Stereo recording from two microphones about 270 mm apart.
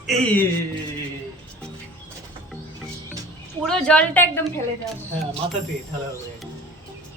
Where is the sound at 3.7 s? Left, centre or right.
Centre.